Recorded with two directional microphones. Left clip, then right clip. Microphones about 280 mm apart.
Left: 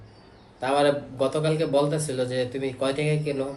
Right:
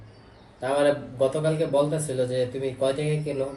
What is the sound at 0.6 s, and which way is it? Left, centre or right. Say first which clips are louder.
Speech: left 1 dB; centre.